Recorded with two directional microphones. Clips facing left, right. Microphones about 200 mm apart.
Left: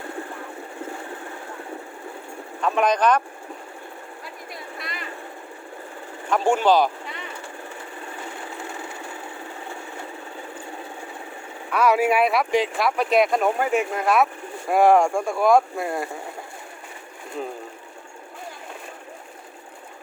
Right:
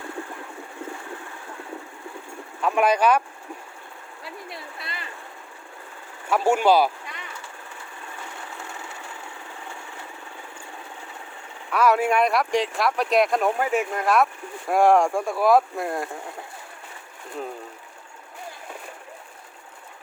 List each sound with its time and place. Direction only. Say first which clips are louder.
2.6 s speech: even; 5° right (ahead or behind)
4.5 s a sound: left 2 dB; 30° right (ahead or behind)
6.2 s speech: even; 10° right (ahead or behind)
11.7 s speech: left 1 dB; centre (ahead or behind)